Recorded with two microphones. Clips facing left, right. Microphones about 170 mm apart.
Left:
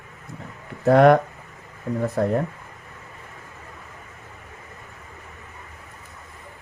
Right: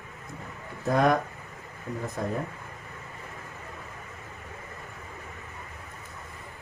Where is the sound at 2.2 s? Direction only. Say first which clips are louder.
Left 9 dB; 65° left (ahead or behind).